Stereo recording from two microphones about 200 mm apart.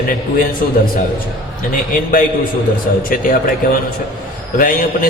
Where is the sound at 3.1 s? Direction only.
45° left (ahead or behind).